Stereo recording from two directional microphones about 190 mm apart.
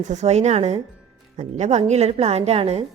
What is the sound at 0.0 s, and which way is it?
A woman's voice, 40° right (ahead or behind).